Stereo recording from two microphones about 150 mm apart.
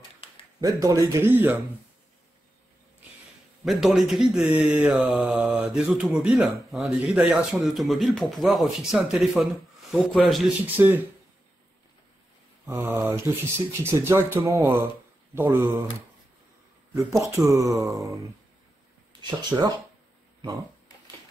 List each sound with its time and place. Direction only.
0.6 s speech: 25° right (ahead or behind)
3.6 s mantra: centre (ahead or behind)
10.6 s speech: 10° right (ahead or behind)
12.6 s speech: 20° right (ahead or behind)
16.9 s speech: 20° right (ahead or behind)
17.9 s mantra: centre (ahead or behind)
19.5 s speech: 15° right (ahead or behind)